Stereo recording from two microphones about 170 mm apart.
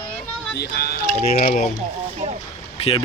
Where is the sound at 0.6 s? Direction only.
70° left (ahead or behind).